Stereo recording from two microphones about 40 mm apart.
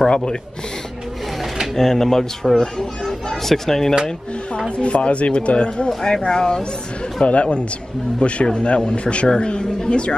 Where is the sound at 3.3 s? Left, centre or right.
Centre.